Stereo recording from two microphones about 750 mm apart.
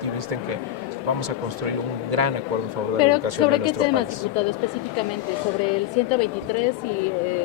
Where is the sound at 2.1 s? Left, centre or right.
Right.